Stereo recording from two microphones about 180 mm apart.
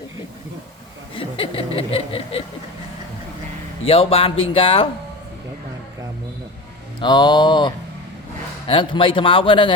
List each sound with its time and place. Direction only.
1.1 s speech: 30° left (ahead or behind)
3.8 s speech: 30° left (ahead or behind)
7.0 s a man's voice: 25° left (ahead or behind)